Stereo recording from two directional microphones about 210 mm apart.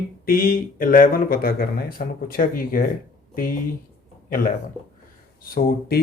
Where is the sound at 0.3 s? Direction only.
45° left (ahead or behind).